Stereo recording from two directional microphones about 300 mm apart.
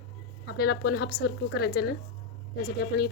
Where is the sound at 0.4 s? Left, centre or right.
Left.